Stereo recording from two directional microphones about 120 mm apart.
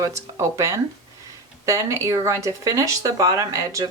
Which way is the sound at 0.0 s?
25° right (ahead or behind).